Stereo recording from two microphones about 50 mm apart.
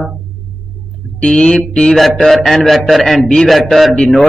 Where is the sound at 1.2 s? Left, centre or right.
Centre.